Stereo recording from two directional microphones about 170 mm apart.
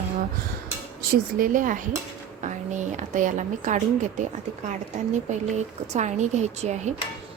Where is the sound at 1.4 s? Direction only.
50° right (ahead or behind).